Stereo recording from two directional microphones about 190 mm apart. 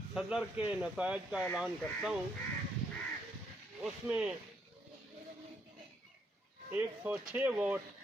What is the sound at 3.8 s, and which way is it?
Speech, 5° right (ahead or behind).